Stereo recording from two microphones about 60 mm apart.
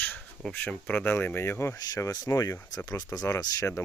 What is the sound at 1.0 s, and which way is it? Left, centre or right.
Speech, left.